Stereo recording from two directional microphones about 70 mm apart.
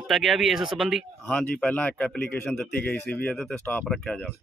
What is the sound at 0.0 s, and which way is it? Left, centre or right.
Speech, centre.